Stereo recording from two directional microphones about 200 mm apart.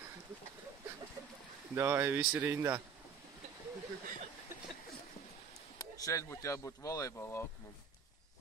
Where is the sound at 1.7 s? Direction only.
10° right (ahead or behind).